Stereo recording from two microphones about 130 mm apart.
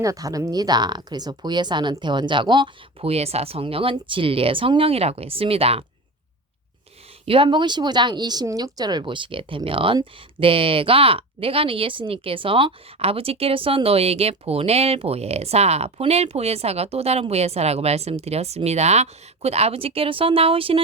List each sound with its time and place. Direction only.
0.0 s speech: 25° right (ahead or behind)
3.1 s speech: 55° right (ahead or behind)
7.3 s speech: 40° right (ahead or behind)